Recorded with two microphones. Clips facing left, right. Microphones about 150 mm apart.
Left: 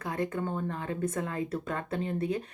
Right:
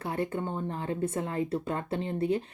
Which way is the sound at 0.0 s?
30° right (ahead or behind).